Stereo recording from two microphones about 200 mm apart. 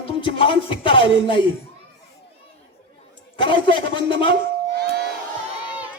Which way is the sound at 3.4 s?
25° left (ahead or behind).